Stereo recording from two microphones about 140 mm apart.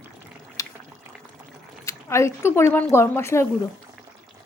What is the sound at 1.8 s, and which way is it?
A woman's voice, 20° left (ahead or behind).